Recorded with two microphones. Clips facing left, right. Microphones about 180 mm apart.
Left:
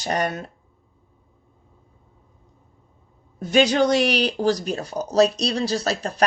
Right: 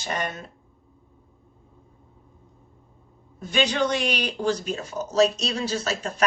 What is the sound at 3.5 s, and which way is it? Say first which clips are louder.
Speech: left 6 dB; 40° left (ahead or behind).